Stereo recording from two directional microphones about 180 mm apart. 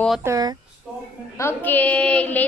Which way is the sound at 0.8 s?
5° right (ahead or behind).